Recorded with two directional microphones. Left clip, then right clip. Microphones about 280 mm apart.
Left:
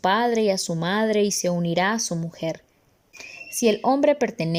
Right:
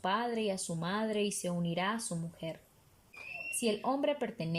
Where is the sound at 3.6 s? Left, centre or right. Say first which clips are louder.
Left 14 dB; left.